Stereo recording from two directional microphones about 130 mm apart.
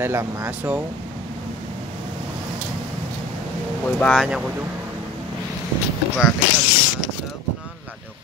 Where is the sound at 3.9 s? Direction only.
10° left (ahead or behind).